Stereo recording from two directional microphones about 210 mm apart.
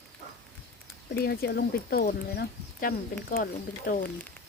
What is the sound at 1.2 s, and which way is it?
Speech, 50° left (ahead or behind).